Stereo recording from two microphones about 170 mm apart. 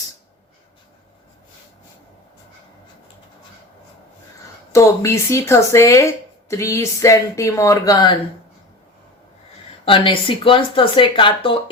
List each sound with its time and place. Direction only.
4.7 s speech: 15° left (ahead or behind)
9.8 s speech: 30° left (ahead or behind)